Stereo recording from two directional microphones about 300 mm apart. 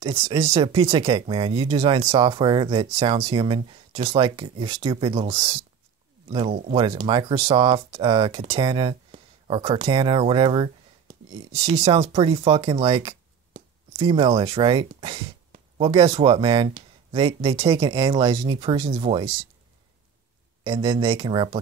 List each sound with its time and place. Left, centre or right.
0.0 s speech: centre
20.6 s speech: centre